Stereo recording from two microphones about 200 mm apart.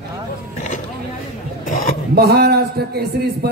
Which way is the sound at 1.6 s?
40° left (ahead or behind).